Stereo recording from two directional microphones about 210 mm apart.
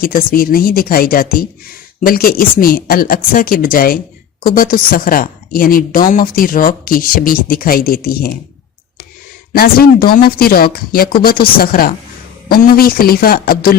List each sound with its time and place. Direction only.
0.0 s a woman's voice: 40° left (ahead or behind)
9.5 s speech: 45° left (ahead or behind)